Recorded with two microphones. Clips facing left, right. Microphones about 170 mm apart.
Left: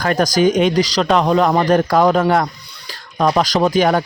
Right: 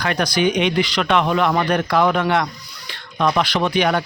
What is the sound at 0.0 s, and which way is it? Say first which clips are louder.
Speech: left 5 dB; 45° left (ahead or behind).